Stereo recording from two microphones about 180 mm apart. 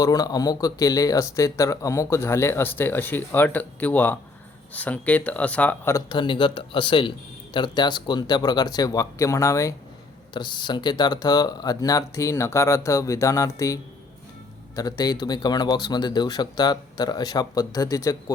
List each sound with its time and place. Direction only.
0.0 s speech: 20° left (ahead or behind)
6.1 s speech: 25° left (ahead or behind)
14.8 s speech: 20° left (ahead or behind)